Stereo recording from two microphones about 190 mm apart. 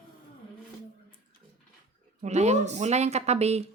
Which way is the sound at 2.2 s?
35° right (ahead or behind).